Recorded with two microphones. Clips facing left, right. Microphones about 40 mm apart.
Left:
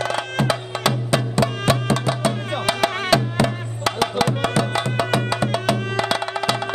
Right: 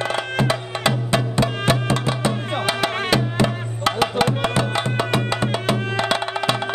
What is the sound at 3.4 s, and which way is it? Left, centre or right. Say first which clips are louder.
Music: right 1 dB; right.